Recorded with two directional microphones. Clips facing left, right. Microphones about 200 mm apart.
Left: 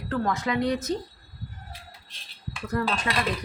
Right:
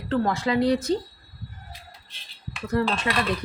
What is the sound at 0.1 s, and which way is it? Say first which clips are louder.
Speech: right 3 dB; 30° right (ahead or behind).